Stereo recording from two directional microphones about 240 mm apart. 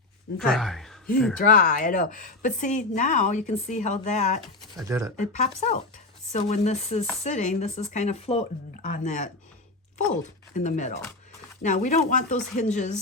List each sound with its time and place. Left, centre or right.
0.3 s speech: centre
1.4 s a woman's voice: left
4.9 s speech: centre
5.1 s speech: left
10.5 s a woman's voice: left